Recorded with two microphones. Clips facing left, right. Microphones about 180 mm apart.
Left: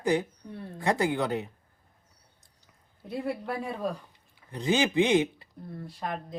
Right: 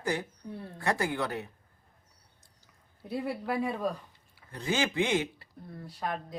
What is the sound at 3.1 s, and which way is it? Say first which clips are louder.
Speech: even; centre (ahead or behind).